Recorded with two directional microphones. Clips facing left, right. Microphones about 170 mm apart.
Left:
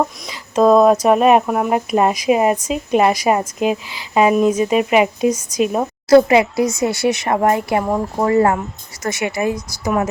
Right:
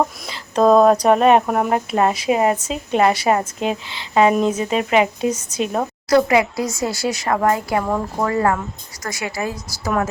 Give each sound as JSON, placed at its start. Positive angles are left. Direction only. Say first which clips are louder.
{"t": 0.3, "sound": "a sound", "louder": "left 2 dB", "side_deg": 5}
{"t": 1.0, "sound": "speech", "louder": "left 1 dB", "side_deg": 5}
{"t": 1.7, "sound": "a woman's voice", "louder": "left 4 dB", "side_deg": 15}
{"t": 6.1, "sound": "speech", "louder": "left 5 dB", "side_deg": 25}